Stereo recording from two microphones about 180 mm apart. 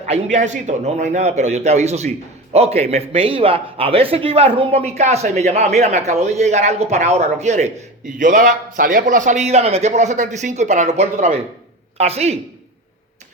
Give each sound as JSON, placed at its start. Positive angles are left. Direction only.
{"t": 0.1, "sound": "speech", "side_deg": -40}